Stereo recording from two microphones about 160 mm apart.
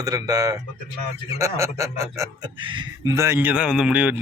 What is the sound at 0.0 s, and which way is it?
Speech, 20° right (ahead or behind).